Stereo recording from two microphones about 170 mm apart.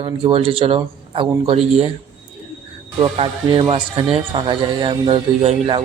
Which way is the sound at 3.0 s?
25° right (ahead or behind).